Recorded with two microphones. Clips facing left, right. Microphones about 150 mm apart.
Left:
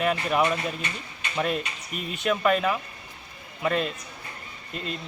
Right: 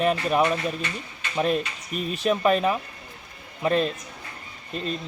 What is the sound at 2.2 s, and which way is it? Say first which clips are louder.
Speech: right 2 dB; 35° right (ahead or behind).